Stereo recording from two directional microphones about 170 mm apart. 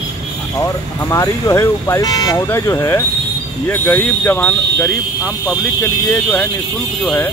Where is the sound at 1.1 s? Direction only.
20° left (ahead or behind).